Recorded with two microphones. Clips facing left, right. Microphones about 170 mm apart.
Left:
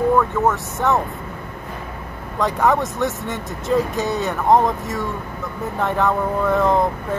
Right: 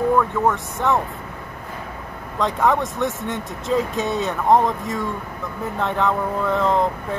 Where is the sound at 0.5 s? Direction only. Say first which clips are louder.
Left 1 dB; centre (ahead or behind).